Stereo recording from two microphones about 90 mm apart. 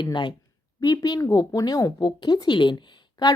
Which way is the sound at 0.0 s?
60° left (ahead or behind).